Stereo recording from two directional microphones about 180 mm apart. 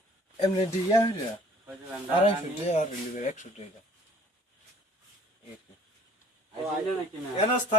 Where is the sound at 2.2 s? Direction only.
40° left (ahead or behind).